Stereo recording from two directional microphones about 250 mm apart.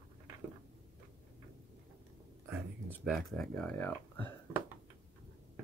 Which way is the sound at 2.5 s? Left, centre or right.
Centre.